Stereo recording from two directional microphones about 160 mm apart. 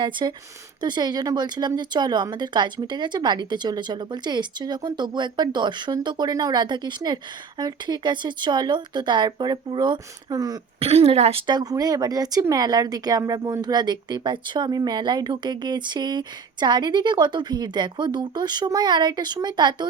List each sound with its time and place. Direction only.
0.0 s speech: 30° right (ahead or behind)
10.8 s speech: 40° right (ahead or behind)